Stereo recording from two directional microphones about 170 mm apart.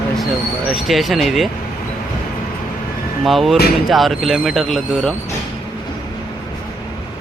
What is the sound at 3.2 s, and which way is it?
Speech, centre (ahead or behind).